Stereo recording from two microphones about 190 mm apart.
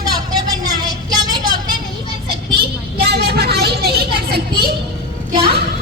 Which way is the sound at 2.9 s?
55° right (ahead or behind).